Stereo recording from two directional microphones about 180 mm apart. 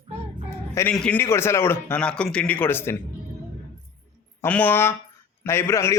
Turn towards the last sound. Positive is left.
turn(degrees=15)  # may be behind; listen again after turning